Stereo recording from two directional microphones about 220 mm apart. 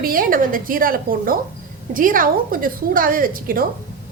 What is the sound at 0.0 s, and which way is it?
A woman's voice, 40° right (ahead or behind).